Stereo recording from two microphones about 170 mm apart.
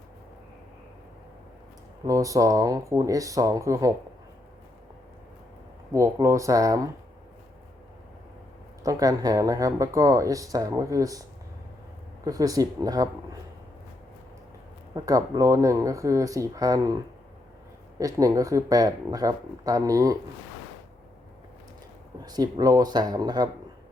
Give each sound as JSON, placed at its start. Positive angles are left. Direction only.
{"t": 2.0, "sound": "speech", "side_deg": -20}
{"t": 5.9, "sound": "speech", "side_deg": -15}
{"t": 8.8, "sound": "speech", "side_deg": -20}
{"t": 12.2, "sound": "speech", "side_deg": -20}
{"t": 14.9, "sound": "speech", "side_deg": -20}
{"t": 17.9, "sound": "speech", "side_deg": -20}
{"t": 22.2, "sound": "speech", "side_deg": -25}